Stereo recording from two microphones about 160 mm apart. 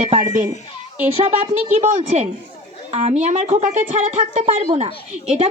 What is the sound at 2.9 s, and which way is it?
Speech, 40° right (ahead or behind).